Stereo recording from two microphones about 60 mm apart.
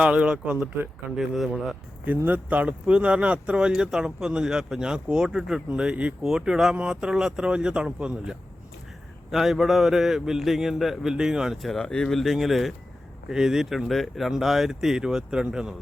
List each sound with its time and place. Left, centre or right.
0.0 s speech: centre
1.1 s a man's voice: centre
2.0 s speech: right
9.3 s a man's voice: centre
11.8 s a man's voice: centre